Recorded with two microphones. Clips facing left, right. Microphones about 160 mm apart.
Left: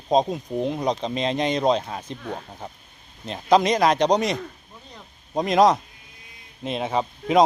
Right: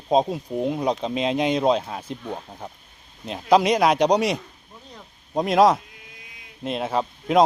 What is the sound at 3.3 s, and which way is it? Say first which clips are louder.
Speech: right 1 dB; 5° right (ahead or behind).